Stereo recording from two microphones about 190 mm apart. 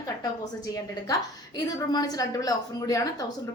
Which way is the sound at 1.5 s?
20° left (ahead or behind).